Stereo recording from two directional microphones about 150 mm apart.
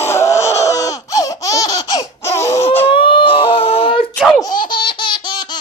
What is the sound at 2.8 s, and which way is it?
Baby cry, 35° left (ahead or behind).